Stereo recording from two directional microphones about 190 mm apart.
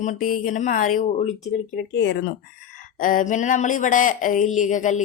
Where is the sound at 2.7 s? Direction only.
45° left (ahead or behind).